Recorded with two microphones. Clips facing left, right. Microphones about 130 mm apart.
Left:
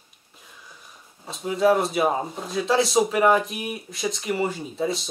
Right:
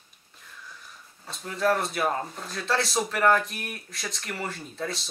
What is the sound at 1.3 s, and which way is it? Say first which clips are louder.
Speech: left 6 dB; 5° left (ahead or behind).